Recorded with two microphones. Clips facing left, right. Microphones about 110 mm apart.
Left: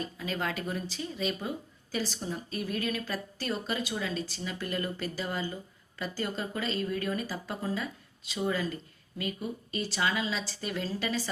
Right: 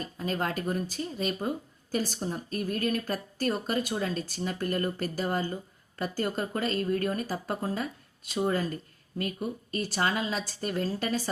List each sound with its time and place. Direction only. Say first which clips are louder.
0.0 s speech: right 2 dB; 45° right (ahead or behind)